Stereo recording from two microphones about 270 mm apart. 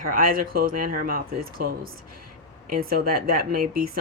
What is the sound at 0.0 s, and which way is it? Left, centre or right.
Speech, right.